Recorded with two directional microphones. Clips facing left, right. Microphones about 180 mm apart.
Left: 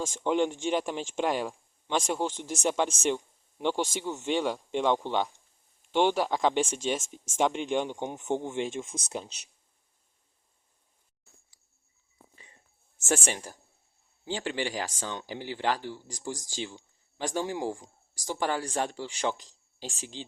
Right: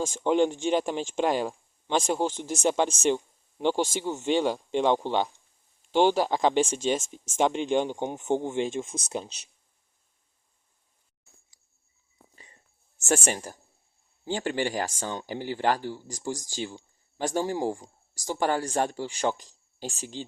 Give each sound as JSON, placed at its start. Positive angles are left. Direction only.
{"t": 0.0, "sound": "speech", "side_deg": -35}
{"t": 13.1, "sound": "speech", "side_deg": -45}